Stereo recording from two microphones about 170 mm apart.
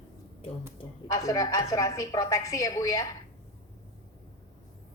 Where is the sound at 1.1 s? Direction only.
20° left (ahead or behind).